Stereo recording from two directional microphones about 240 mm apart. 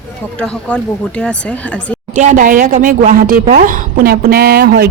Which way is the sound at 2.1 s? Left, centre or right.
Right.